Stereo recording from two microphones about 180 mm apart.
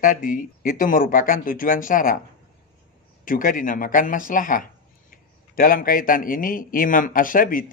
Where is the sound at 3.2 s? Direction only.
50° left (ahead or behind).